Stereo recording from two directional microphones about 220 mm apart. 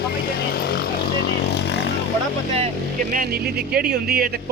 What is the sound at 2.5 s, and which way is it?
Speech, 40° right (ahead or behind).